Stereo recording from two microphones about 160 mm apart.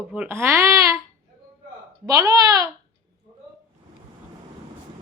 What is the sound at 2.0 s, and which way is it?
Speech, 25° right (ahead or behind).